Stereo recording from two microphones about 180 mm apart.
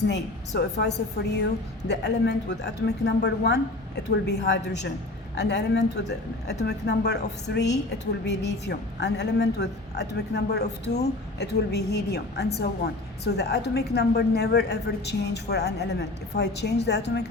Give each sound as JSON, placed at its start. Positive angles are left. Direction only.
{"t": 0.1, "sound": "a woman's voice", "side_deg": 70}